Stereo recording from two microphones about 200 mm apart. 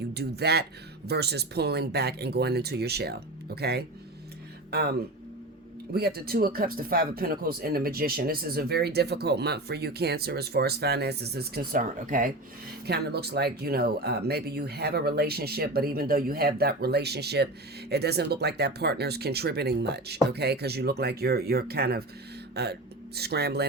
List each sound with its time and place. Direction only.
0.1 s speech: 55° right (ahead or behind)
12.8 s speech: 55° right (ahead or behind)